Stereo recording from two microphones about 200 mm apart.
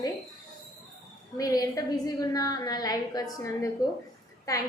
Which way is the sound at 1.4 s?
20° left (ahead or behind).